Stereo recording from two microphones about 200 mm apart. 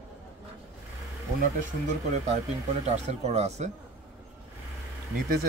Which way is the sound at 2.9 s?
35° right (ahead or behind).